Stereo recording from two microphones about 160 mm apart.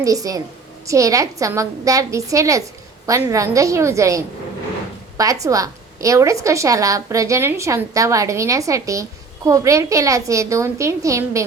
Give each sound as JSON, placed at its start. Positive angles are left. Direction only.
{"t": 0.0, "sound": "a woman's voice", "side_deg": -20}